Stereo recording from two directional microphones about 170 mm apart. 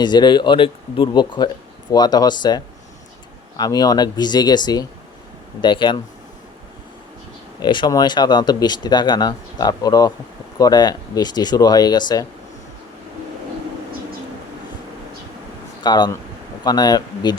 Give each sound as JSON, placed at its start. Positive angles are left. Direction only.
{"t": 0.0, "sound": "speech", "side_deg": 25}
{"t": 3.6, "sound": "speech", "side_deg": 20}
{"t": 7.6, "sound": "speech", "side_deg": 25}
{"t": 15.8, "sound": "speech", "side_deg": 25}